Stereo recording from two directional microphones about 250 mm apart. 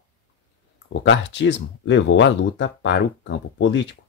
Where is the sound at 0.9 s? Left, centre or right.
Left.